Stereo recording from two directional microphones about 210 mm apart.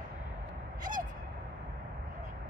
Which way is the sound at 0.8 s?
40° right (ahead or behind).